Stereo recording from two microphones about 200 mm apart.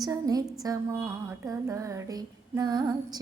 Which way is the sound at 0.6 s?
15° right (ahead or behind).